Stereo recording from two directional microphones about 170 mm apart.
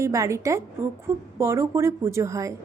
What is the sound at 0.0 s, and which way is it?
A woman's voice, 20° right (ahead or behind).